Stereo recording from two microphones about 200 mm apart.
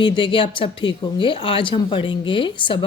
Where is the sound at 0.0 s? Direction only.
25° left (ahead or behind).